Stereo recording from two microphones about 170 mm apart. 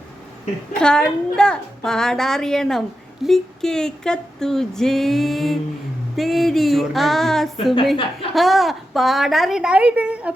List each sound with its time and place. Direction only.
0.7 s female singing: 5° left (ahead or behind)